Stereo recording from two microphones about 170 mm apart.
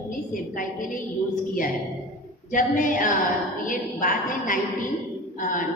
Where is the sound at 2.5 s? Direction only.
50° left (ahead or behind).